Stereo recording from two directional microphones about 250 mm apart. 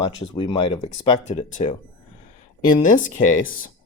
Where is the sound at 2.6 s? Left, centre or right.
Left.